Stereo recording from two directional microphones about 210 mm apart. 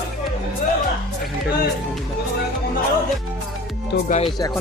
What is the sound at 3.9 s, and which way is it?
Speech, 50° left (ahead or behind).